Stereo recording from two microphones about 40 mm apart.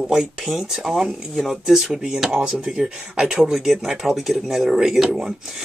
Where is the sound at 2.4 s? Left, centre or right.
Right.